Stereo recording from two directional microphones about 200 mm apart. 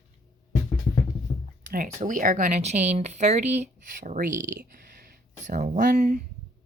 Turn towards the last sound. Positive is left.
turn(degrees=-45)  # may be behind; listen again after turning